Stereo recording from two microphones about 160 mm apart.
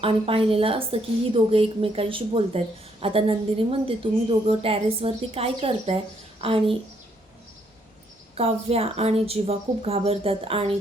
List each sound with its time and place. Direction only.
0.0 s a woman's voice: 35° right (ahead or behind)
8.4 s a woman's voice: 40° right (ahead or behind)